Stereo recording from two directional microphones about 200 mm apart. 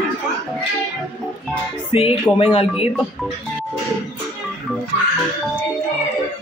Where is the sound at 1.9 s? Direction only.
25° left (ahead or behind).